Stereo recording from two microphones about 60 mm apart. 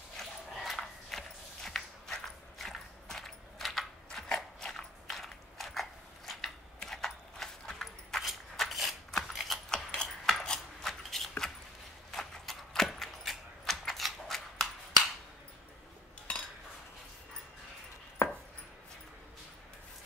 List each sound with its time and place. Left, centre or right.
0.2 s a sound: centre
12.1 s keys jangling: centre
16.3 s cutlery: centre
18.2 s chopping: left